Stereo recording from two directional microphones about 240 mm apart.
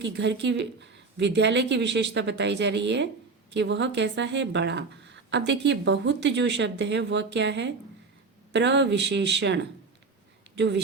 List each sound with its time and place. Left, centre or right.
0.0 s speech: right